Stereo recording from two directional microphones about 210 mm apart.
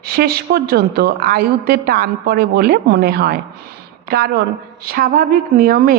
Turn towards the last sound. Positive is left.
turn(degrees=-45)  # may be behind; listen again after turning